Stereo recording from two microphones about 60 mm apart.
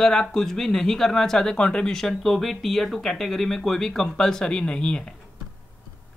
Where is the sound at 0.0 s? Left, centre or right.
Centre.